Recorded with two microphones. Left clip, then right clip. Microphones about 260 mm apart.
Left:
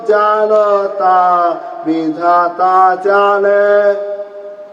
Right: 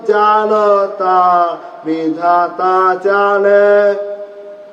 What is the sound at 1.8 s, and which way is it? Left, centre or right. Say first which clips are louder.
Mantra: left 1 dB; left.